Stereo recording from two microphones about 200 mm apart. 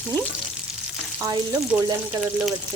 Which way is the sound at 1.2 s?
15° right (ahead or behind).